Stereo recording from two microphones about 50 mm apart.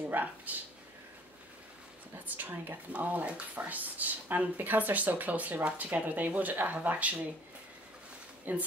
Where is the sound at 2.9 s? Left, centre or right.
Right.